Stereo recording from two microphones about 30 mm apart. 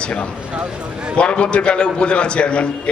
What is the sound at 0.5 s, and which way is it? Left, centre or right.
Speech, right.